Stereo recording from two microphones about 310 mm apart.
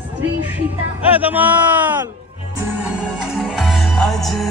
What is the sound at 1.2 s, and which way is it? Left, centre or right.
Speech, centre.